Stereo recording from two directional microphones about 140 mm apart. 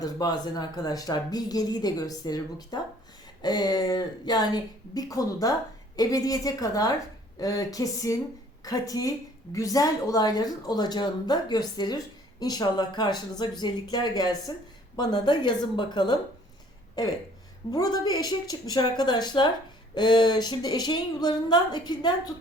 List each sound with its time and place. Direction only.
0.0 s a woman's voice: 30° left (ahead or behind)
17.7 s a woman's voice: 30° left (ahead or behind)